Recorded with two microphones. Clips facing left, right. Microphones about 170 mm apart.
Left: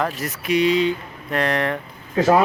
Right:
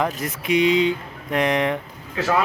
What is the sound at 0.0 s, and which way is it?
Speech, 20° right (ahead or behind).